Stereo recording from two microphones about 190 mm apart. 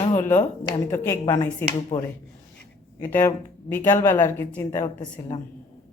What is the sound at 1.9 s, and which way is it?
Speech, 25° left (ahead or behind).